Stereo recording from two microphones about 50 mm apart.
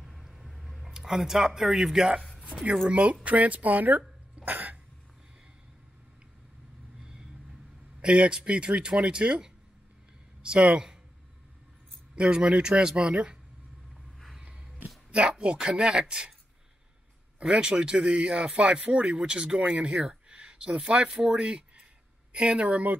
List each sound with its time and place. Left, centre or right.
0.0 s a sound: centre
2.9 s speech: right
4.5 s cough: right
7.0 s vehicle: centre
8.0 s speech: centre
12.2 s speech: centre
14.4 s a sound: right
15.0 s speech: centre
17.4 s speech: centre